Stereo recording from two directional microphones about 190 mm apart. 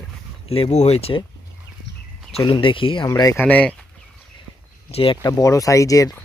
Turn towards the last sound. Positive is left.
turn(degrees=20)  # may be behind; listen again after turning